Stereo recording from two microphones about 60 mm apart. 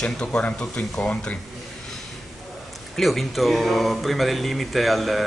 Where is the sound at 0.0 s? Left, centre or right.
Centre.